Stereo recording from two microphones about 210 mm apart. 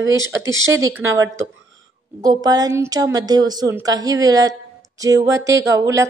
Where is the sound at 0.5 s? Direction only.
70° right (ahead or behind).